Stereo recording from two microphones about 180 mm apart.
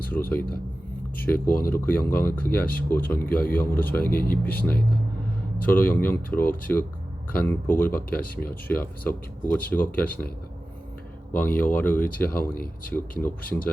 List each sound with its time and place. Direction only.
0.1 s speech: 10° left (ahead or behind)
1.6 s speech: 10° left (ahead or behind)
5.6 s speech: 10° left (ahead or behind)
11.3 s speech: 10° left (ahead or behind)
12.3 s speech: 50° left (ahead or behind)
12.9 s speech: 10° left (ahead or behind)